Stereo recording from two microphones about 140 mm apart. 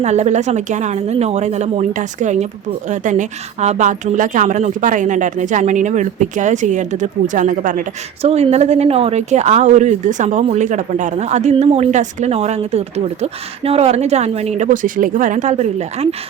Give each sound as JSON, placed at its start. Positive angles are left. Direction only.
{"t": 0.0, "sound": "a woman's voice", "side_deg": -55}
{"t": 8.2, "sound": "speech", "side_deg": -50}